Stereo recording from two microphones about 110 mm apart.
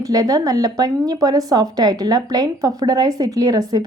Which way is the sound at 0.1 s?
35° right (ahead or behind).